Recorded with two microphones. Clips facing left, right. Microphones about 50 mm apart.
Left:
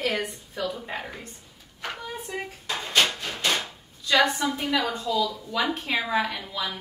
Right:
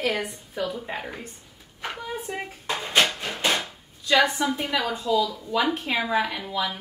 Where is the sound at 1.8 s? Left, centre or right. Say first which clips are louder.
Right 2 dB; centre.